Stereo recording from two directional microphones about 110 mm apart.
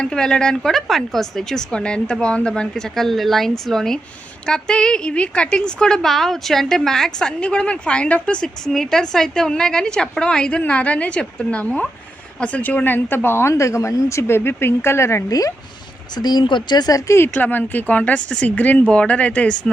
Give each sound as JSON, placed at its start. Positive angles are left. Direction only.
{"t": 0.0, "sound": "a woman's voice", "side_deg": 5}
{"t": 17.2, "sound": "a woman's voice", "side_deg": 20}